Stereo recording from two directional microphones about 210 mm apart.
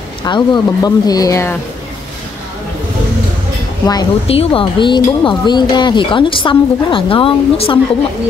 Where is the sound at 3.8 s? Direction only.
25° left (ahead or behind).